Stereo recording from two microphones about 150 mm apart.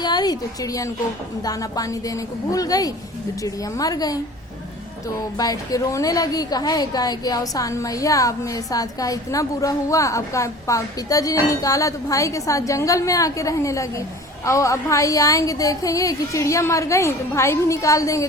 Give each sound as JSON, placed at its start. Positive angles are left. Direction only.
{"t": 0.0, "sound": "a woman's voice", "side_deg": 30}
{"t": 5.4, "sound": "a woman's voice", "side_deg": 25}